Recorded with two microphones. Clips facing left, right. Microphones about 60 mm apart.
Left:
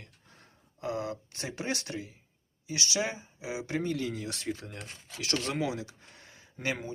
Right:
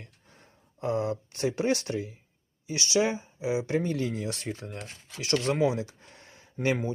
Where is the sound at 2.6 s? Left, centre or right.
Right.